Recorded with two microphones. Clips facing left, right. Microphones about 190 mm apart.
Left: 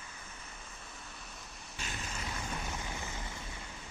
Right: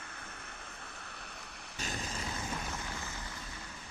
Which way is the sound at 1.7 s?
40° right (ahead or behind).